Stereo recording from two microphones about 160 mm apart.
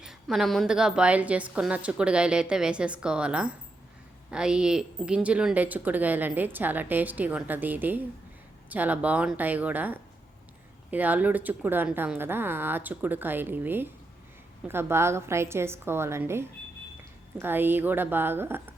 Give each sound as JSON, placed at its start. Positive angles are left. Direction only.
{"t": 0.0, "sound": "speech", "side_deg": 0}